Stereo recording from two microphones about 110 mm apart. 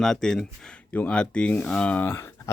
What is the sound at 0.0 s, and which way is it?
Speech, 5° left (ahead or behind).